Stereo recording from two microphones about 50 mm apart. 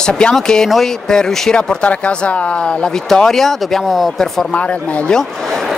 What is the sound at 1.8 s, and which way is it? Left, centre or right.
Speech, left.